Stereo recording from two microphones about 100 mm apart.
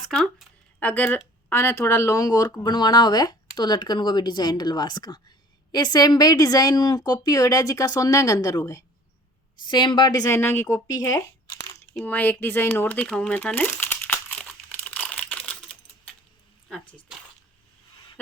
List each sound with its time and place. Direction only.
0.1 s speech: 5° left (ahead or behind)
0.8 s a woman's voice: 15° left (ahead or behind); by 8.8 s 35° left (ahead or behind)
9.6 s speech: 50° left (ahead or behind)
10.2 s speech: 25° left (ahead or behind)
10.8 s a woman's voice: 35° left (ahead or behind)
12.0 s crumpling: 15° left (ahead or behind)